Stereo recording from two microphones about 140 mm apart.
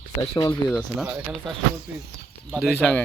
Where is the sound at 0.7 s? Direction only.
Centre (ahead or behind).